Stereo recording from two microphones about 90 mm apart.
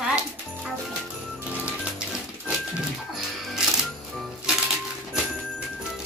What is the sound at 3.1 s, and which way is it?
Music, 5° right (ahead or behind).